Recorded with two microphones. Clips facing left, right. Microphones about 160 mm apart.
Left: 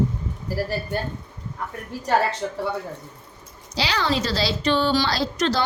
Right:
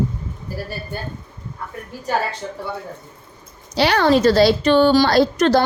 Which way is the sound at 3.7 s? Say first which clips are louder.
Right 9 dB; 60° right (ahead or behind).